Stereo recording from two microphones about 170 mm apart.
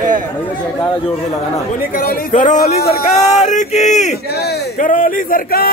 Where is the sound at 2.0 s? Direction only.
55° left (ahead or behind).